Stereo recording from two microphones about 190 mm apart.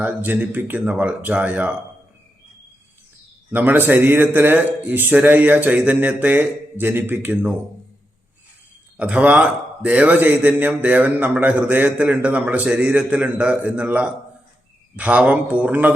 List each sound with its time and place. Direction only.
0.0 s a man's voice: 10° right (ahead or behind)
3.5 s a man's voice: 10° right (ahead or behind)
9.0 s a man's voice: 5° right (ahead or behind)